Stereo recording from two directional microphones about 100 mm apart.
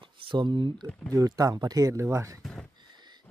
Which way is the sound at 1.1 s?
35° right (ahead or behind).